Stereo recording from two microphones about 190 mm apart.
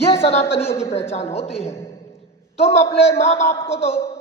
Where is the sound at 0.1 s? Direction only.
30° left (ahead or behind).